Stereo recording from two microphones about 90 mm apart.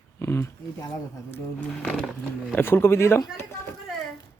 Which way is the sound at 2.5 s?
25° left (ahead or behind).